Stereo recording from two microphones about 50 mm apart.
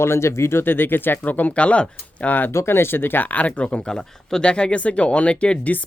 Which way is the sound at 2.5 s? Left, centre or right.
Left.